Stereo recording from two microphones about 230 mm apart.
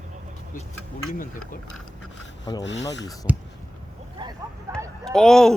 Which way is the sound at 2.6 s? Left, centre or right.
Left.